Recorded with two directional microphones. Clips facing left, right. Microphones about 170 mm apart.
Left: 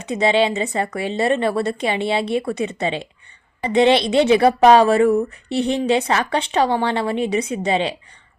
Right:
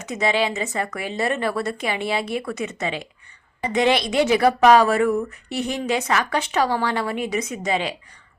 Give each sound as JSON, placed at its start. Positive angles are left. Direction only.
{"t": 0.0, "sound": "a woman's voice", "side_deg": 30}